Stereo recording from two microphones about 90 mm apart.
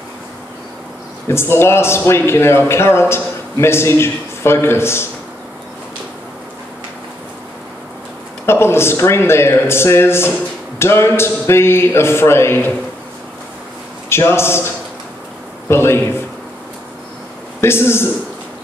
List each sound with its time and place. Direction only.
1.2 s a man's voice: 30° left (ahead or behind)
8.5 s a man's voice: 30° left (ahead or behind)
14.0 s a man's voice: 30° left (ahead or behind)
15.7 s a man's voice: 30° left (ahead or behind)
17.6 s a man's voice: 30° left (ahead or behind)